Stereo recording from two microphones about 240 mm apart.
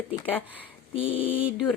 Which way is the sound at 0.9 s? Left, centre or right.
Left.